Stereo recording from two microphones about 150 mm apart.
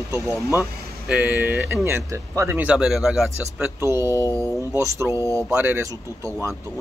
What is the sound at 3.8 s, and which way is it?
Speech, 20° right (ahead or behind).